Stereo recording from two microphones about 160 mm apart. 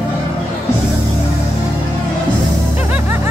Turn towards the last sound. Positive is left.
turn(degrees=-10)  # may be behind; listen again after turning